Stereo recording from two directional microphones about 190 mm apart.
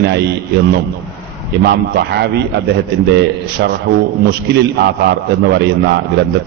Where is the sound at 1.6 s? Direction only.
60° right (ahead or behind).